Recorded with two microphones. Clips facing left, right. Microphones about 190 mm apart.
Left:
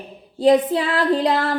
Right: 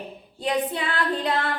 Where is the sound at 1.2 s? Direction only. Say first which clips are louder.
Left 6 dB; 35° left (ahead or behind).